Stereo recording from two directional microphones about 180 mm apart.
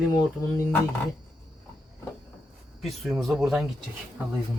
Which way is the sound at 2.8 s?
Centre (ahead or behind).